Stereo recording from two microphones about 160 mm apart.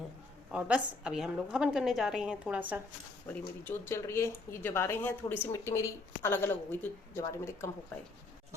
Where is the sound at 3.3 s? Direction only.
15° left (ahead or behind).